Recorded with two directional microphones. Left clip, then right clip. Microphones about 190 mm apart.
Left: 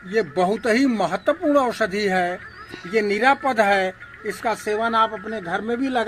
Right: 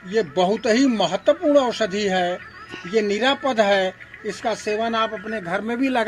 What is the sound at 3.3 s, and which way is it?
A man's voice, 25° right (ahead or behind).